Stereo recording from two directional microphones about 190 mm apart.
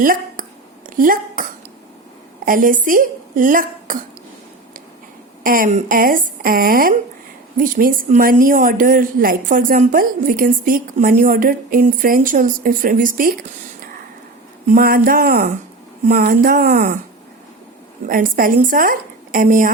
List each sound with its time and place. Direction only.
0.0 s a woman's voice: 45° right (ahead or behind)
5.4 s a woman's voice: 45° right (ahead or behind)
14.7 s a woman's voice: 50° right (ahead or behind)
18.1 s a woman's voice: 45° right (ahead or behind)